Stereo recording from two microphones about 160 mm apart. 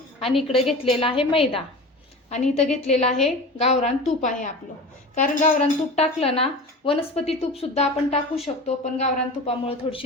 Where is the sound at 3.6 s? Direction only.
45° left (ahead or behind).